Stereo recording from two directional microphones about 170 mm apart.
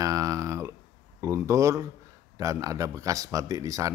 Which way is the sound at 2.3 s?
20° right (ahead or behind).